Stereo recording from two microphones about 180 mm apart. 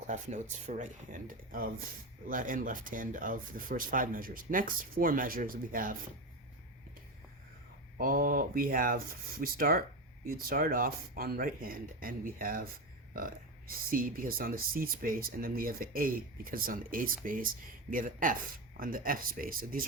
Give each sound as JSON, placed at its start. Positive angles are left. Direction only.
{"t": 0.1, "sound": "speech", "side_deg": -40}
{"t": 7.9, "sound": "speech", "side_deg": -50}